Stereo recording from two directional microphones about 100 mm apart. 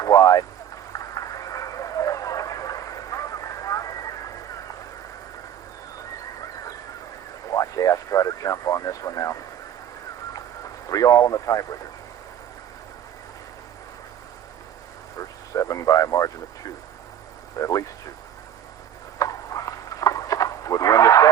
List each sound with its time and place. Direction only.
0.0 s vehicle: 35° left (ahead or behind)
0.9 s a sound: 35° left (ahead or behind)
7.5 s speech: 35° left (ahead or behind)
10.8 s speech: 35° left (ahead or behind)
15.5 s radio: 35° left (ahead or behind)
17.6 s a sound: 35° left (ahead or behind)
19.2 s livestock: 35° left (ahead or behind)